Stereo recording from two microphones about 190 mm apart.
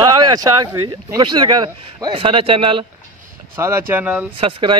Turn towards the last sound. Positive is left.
turn(degrees=-25)  # may be behind; listen again after turning